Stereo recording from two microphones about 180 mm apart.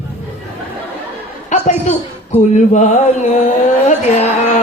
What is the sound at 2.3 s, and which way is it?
A man's voice, 40° left (ahead or behind).